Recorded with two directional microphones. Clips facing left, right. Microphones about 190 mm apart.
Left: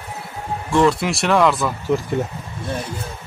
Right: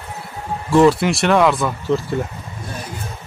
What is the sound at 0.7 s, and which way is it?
Speech, 5° right (ahead or behind).